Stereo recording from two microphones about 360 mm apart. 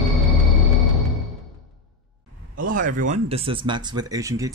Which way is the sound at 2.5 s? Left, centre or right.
Right.